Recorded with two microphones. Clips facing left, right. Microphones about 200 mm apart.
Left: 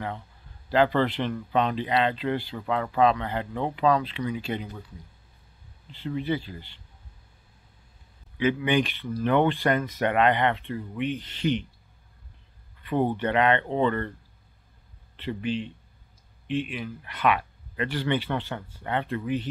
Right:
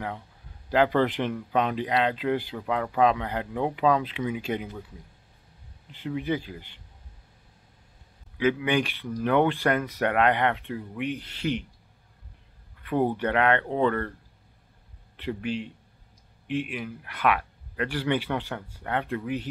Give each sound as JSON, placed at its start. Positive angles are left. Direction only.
{"t": 0.7, "sound": "speech", "side_deg": -10}
{"t": 5.9, "sound": "speech", "side_deg": -10}
{"t": 8.4, "sound": "speech", "side_deg": -5}
{"t": 12.8, "sound": "speech", "side_deg": -5}
{"t": 15.1, "sound": "speech", "side_deg": -10}